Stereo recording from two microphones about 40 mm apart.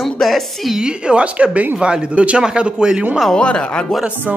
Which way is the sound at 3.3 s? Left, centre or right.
Left.